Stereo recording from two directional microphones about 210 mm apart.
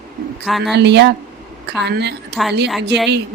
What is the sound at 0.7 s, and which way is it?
Speech, 55° right (ahead or behind).